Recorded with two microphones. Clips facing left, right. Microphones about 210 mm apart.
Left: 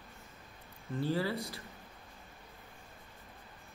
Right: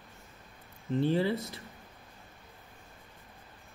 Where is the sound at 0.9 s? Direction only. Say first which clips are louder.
Right 6 dB; 20° right (ahead or behind).